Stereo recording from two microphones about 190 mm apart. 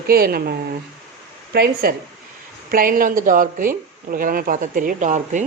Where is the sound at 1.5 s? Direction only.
55° right (ahead or behind).